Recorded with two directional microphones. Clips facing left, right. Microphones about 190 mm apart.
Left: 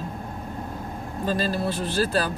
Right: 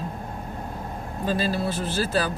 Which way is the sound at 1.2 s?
45° left (ahead or behind).